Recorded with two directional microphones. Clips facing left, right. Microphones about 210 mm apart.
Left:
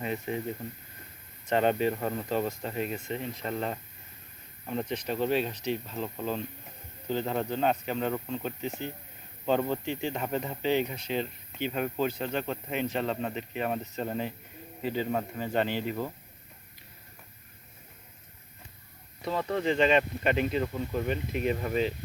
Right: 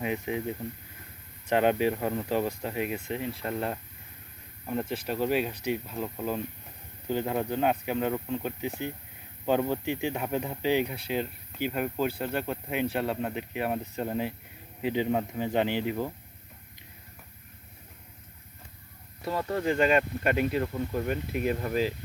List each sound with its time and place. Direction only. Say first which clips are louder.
0.0 s speech: right 2 dB; 10° right (ahead or behind)
19.2 s speech: even; 5° right (ahead or behind)